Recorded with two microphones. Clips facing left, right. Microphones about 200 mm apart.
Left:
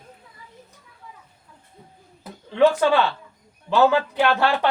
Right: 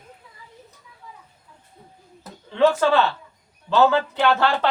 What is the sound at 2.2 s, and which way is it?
Speech, 15° left (ahead or behind).